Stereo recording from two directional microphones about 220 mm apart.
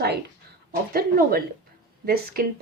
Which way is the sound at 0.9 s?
40° right (ahead or behind).